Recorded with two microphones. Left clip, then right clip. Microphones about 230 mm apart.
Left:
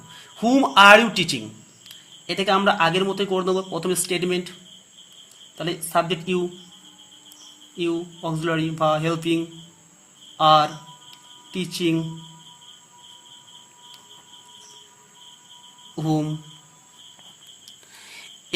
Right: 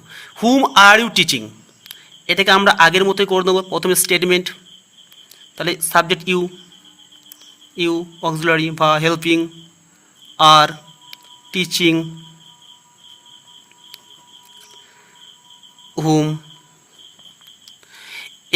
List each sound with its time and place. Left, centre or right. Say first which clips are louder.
0.1 s a man's voice: right 5 dB; right
5.5 s speech: right 7 dB; right
7.8 s a man's voice: right 6 dB; right
11.1 s a sound: right 10 dB; right
16.0 s speech: right 8 dB; right
17.9 s a sound: right 10 dB; right